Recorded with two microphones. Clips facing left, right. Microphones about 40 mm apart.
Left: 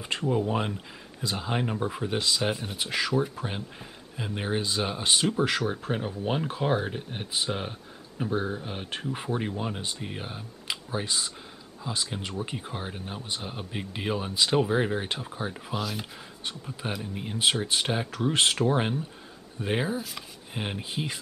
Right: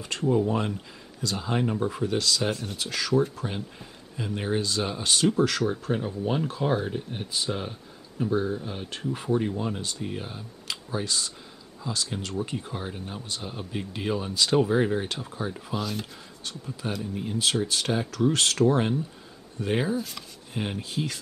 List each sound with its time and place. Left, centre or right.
0.0 s speech: centre
15.7 s speech: centre
16.4 s speech: left
20.2 s chopping: centre